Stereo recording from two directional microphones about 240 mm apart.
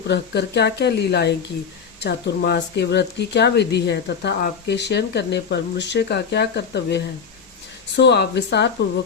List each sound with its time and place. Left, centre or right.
0.1 s speech: left